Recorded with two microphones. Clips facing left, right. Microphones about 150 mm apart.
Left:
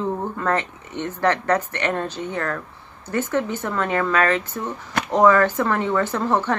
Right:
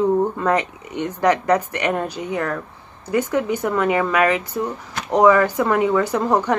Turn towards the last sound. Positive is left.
turn(degrees=-15)  # may be behind; listen again after turning